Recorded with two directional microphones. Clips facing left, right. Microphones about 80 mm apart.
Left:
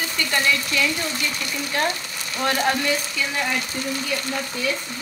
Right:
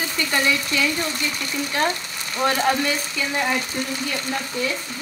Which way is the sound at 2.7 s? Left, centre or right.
Centre.